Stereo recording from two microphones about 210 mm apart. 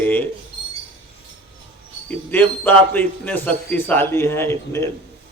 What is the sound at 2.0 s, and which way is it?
A man's voice, 10° left (ahead or behind).